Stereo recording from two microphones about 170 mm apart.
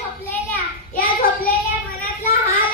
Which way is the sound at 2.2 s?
55° left (ahead or behind).